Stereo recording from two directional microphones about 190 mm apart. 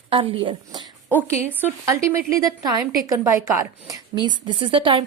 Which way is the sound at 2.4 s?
20° right (ahead or behind).